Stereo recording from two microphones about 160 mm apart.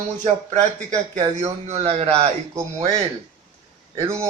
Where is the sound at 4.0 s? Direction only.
15° right (ahead or behind).